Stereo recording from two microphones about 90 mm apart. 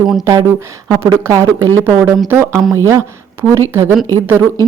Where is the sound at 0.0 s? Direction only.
5° right (ahead or behind).